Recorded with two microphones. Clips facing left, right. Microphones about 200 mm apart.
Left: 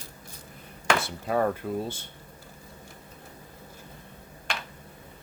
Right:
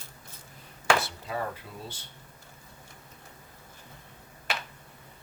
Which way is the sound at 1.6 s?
50° left (ahead or behind).